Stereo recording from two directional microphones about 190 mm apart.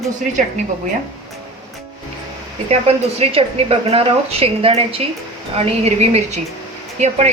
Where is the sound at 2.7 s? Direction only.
30° right (ahead or behind).